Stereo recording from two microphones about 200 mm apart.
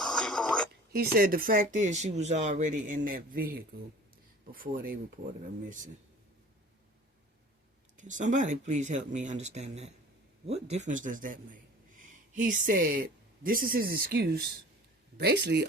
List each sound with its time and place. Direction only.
0.0 s a sound: centre (ahead or behind)
0.9 s speech: 50° right (ahead or behind)
7.9 s a man's voice: 40° right (ahead or behind); by 15.6 s 55° right (ahead or behind)